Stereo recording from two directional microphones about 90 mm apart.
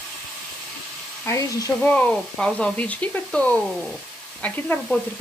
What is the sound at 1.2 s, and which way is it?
Speech, 35° left (ahead or behind).